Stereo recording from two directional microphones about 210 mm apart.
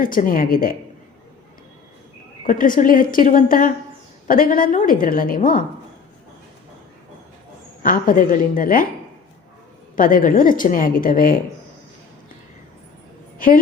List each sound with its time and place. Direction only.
0.0 s a woman's voice: 40° left (ahead or behind)
2.5 s a woman's voice: 40° left (ahead or behind)
7.8 s a woman's voice: 40° left (ahead or behind)
9.9 s a woman's voice: 40° left (ahead or behind)